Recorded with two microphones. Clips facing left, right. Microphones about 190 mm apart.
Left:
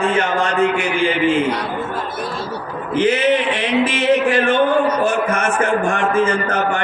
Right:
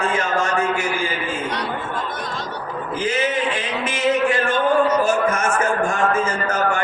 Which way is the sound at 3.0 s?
65° left (ahead or behind).